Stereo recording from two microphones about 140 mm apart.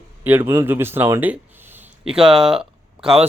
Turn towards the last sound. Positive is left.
turn(degrees=-5)  # may be behind; listen again after turning